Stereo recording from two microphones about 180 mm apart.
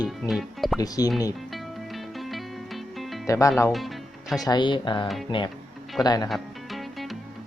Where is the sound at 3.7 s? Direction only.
Centre (ahead or behind).